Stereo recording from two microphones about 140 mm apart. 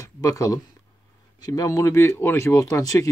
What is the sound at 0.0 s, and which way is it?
Speech, 25° left (ahead or behind).